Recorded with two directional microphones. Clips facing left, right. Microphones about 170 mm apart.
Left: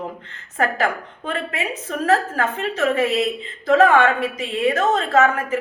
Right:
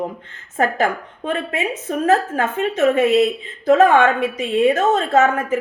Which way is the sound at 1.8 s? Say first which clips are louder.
Right 2 dB; 20° right (ahead or behind).